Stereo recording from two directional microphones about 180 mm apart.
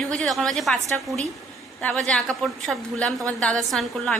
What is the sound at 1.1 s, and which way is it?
Speech, 20° right (ahead or behind).